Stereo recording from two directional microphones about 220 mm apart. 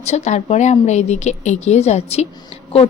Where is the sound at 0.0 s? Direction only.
30° left (ahead or behind).